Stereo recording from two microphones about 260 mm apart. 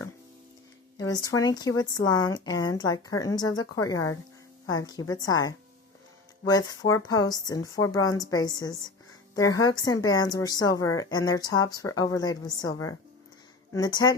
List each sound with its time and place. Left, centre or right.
0.9 s speech: centre